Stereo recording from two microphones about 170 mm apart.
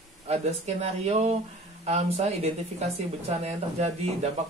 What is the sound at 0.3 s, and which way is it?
Speech, 40° right (ahead or behind).